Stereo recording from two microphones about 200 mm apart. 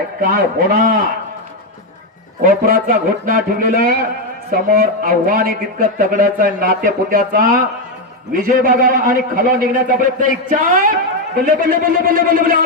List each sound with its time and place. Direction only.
0.2 s a man's voice: 45° right (ahead or behind)
2.4 s a man's voice: 45° right (ahead or behind)